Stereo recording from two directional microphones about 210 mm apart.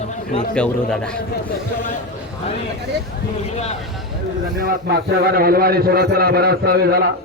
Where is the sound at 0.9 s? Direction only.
5° left (ahead or behind).